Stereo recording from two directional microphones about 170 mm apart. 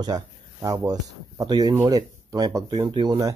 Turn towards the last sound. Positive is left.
turn(degrees=-25)  # may be behind; listen again after turning